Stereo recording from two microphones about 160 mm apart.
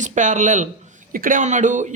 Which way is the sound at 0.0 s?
50° right (ahead or behind).